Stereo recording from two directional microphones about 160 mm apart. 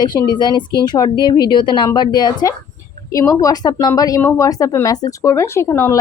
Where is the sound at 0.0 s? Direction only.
25° left (ahead or behind).